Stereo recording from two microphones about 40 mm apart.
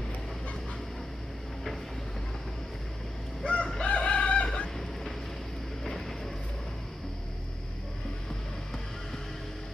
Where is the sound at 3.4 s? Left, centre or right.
Left.